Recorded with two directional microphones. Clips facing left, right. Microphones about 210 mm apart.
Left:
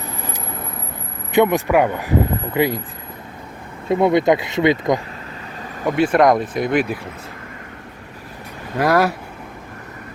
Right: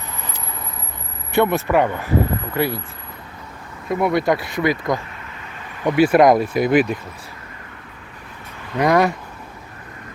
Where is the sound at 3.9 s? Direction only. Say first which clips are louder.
Left 4 dB; 25° left (ahead or behind).